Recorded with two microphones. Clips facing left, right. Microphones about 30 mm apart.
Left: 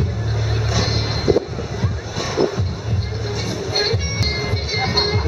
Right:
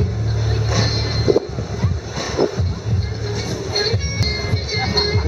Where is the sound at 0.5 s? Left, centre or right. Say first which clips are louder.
Right 1 dB; centre.